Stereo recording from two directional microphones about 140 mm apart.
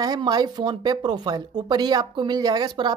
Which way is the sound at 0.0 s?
30° right (ahead or behind).